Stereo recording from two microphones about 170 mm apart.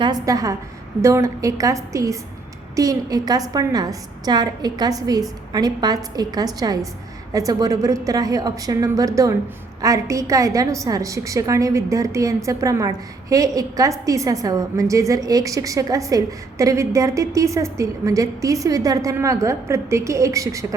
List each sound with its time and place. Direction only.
0.0 s a woman's voice: 20° right (ahead or behind)